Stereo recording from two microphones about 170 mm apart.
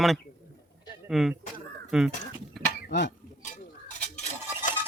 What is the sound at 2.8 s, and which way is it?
Speech, 90° left.